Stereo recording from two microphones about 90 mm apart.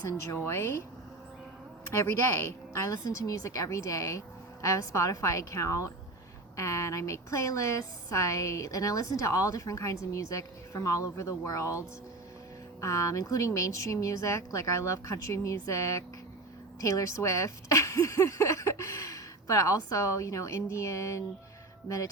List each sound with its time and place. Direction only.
0.3 s a woman's voice: 30° left (ahead or behind)
1.9 s a woman's voice: 30° left (ahead or behind)
12.8 s a woman's voice: 35° left (ahead or behind)